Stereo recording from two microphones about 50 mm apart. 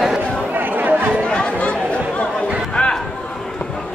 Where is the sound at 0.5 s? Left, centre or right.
Right.